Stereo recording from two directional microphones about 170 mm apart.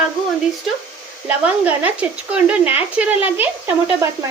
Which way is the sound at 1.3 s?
10° right (ahead or behind).